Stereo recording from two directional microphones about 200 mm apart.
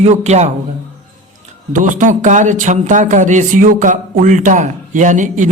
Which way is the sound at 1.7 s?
40° right (ahead or behind).